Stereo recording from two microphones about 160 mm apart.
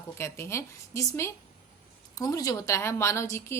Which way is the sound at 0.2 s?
15° left (ahead or behind).